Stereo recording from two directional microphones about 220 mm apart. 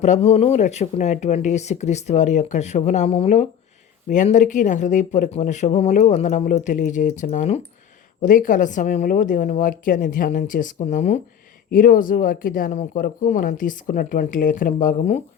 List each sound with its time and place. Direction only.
0.0 s speech: 30° left (ahead or behind)